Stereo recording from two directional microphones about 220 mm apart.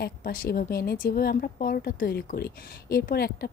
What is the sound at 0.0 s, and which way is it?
A woman's voice, 40° left (ahead or behind).